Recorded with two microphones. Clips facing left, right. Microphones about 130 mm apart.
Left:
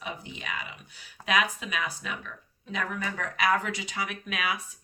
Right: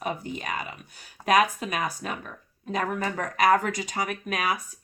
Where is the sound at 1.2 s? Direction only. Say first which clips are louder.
Right 6 dB; 45° right (ahead or behind).